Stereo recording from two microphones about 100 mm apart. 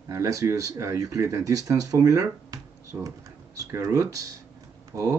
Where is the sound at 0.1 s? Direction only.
35° right (ahead or behind).